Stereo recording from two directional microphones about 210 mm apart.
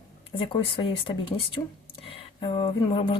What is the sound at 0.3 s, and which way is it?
Speech, 25° left (ahead or behind).